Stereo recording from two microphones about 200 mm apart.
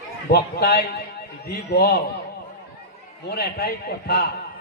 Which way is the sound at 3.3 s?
50° left (ahead or behind).